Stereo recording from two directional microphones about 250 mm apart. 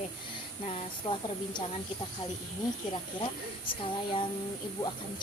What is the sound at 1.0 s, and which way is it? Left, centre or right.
Speech, left.